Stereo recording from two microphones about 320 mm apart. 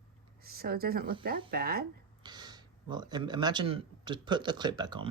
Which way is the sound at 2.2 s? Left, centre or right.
Centre.